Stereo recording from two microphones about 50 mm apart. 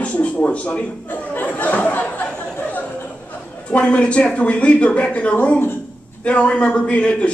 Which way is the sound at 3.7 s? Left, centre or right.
Left.